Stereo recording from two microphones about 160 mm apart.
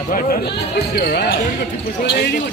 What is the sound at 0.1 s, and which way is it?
Speech, 60° left (ahead or behind).